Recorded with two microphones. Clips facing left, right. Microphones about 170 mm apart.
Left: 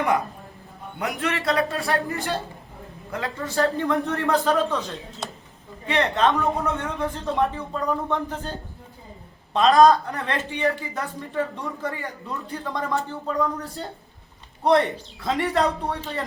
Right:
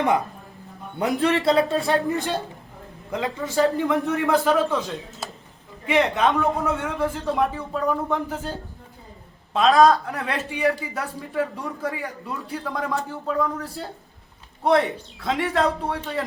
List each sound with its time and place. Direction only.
0.9 s a man's voice: 30° right (ahead or behind); by 4.8 s 10° right (ahead or behind)
5.2 s a sound: 5° right (ahead or behind)
5.8 s speech: 15° right (ahead or behind)